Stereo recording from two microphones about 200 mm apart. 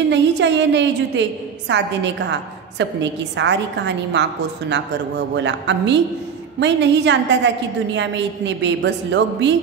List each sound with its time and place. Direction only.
0.1 s a woman's voice: 60° right (ahead or behind)